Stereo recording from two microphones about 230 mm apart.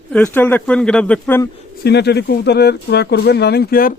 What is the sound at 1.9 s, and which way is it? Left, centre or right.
Speech, left.